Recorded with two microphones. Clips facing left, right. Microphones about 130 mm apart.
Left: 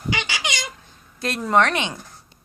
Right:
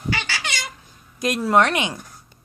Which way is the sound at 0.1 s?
15° left (ahead or behind).